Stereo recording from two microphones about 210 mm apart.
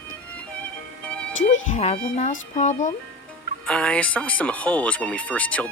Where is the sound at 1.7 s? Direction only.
30° left (ahead or behind).